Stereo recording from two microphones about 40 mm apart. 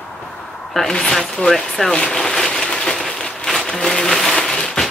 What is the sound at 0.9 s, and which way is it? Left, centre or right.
Speech, centre.